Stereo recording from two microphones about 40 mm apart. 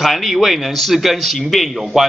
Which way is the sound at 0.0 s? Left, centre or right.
Centre.